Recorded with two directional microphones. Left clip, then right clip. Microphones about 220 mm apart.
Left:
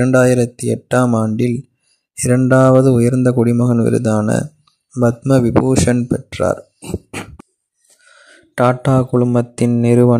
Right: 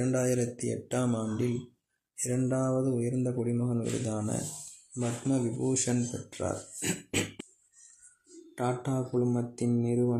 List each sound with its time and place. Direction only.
0.0 s speech: 45° left (ahead or behind)
6.8 s burping: 10° left (ahead or behind)
8.5 s speech: 45° left (ahead or behind)